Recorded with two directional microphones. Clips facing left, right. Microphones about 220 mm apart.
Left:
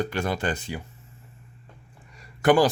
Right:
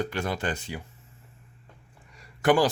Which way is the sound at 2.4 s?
45° left (ahead or behind).